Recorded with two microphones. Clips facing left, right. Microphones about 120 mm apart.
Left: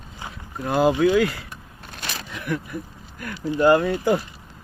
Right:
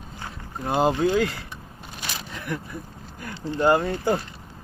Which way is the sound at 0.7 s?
25° right (ahead or behind).